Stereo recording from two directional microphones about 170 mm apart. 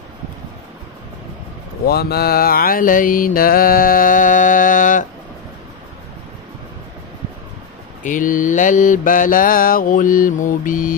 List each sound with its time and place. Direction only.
1.9 s mantra: 70° left (ahead or behind); by 5.0 s 50° left (ahead or behind)
8.0 s mantra: 50° left (ahead or behind)